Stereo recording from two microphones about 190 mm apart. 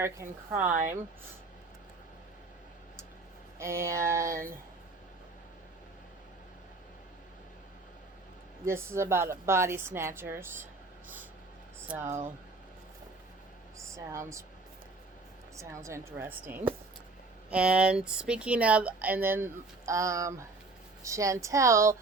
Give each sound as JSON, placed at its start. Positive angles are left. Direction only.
{"t": 0.0, "sound": "speech", "side_deg": -10}
{"t": 0.7, "sound": "speech", "side_deg": -45}
{"t": 3.6, "sound": "speech", "side_deg": -15}
{"t": 8.6, "sound": "speech", "side_deg": -15}
{"t": 11.9, "sound": "speech", "side_deg": -10}
{"t": 13.7, "sound": "speech", "side_deg": -15}
{"t": 15.5, "sound": "speech", "side_deg": -15}